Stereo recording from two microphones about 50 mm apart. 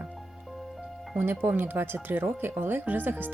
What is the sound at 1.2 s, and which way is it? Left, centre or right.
Speech, right.